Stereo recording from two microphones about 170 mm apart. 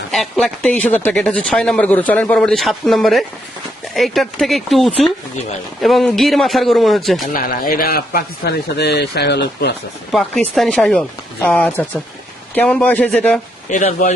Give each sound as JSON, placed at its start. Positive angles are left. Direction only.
{"t": 0.1, "sound": "speech", "side_deg": 0}
{"t": 7.3, "sound": "a man's voice", "side_deg": 55}
{"t": 10.1, "sound": "a man's voice", "side_deg": 0}
{"t": 13.7, "sound": "speech", "side_deg": 45}